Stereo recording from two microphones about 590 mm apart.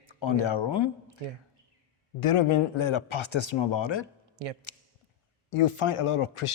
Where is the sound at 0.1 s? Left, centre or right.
Left.